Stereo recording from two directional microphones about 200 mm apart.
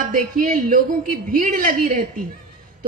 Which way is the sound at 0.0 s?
40° right (ahead or behind).